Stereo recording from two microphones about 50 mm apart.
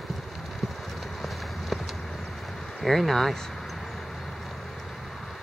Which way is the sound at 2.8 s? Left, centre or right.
Centre.